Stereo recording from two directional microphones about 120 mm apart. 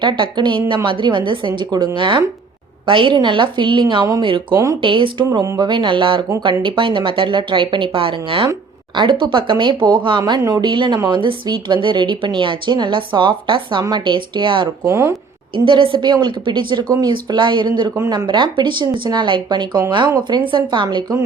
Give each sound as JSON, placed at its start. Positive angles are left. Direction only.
{"t": 0.0, "sound": "a woman's voice", "side_deg": -40}
{"t": 4.5, "sound": "speech", "side_deg": -25}
{"t": 4.8, "sound": "a woman's voice", "side_deg": -45}
{"t": 14.8, "sound": "speech", "side_deg": -20}
{"t": 15.5, "sound": "a woman's voice", "side_deg": -45}